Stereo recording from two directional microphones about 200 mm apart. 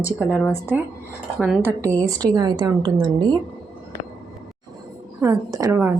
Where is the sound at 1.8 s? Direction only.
15° right (ahead or behind).